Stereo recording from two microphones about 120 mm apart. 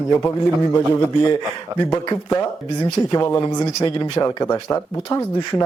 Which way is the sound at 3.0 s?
30° left (ahead or behind).